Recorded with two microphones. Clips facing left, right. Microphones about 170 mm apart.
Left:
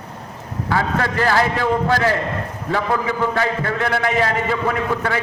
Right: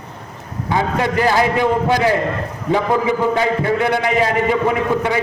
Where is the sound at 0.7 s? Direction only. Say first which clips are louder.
Right 3 dB; 15° right (ahead or behind).